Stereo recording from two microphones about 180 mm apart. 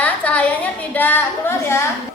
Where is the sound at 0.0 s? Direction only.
10° left (ahead or behind).